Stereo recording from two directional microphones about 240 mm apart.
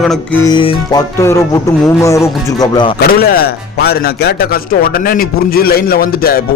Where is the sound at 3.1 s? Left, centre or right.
Left.